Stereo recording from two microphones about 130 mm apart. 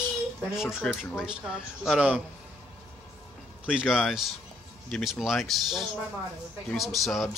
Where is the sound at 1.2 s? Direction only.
5° right (ahead or behind).